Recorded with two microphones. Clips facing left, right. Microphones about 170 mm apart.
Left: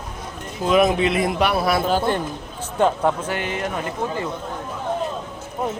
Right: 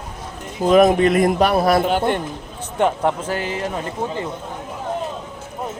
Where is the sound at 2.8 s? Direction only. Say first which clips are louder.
Even; 20° right (ahead or behind).